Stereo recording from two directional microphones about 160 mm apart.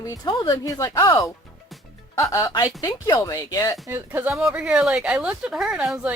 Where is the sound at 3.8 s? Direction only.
10° right (ahead or behind).